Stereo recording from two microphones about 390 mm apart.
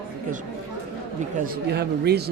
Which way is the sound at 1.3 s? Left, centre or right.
Right.